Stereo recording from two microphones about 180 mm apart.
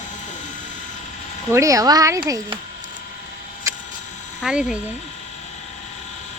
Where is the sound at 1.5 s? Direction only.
15° right (ahead or behind).